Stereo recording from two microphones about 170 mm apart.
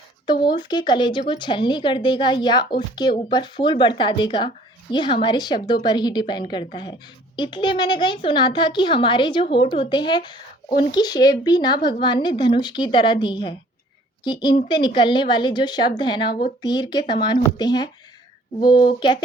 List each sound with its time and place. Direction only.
0.5 s speech: 25° left (ahead or behind)